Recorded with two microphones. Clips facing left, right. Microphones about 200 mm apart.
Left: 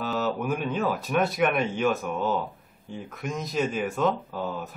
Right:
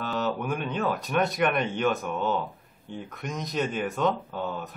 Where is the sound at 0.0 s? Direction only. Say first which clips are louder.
Left 1 dB; 5° left (ahead or behind).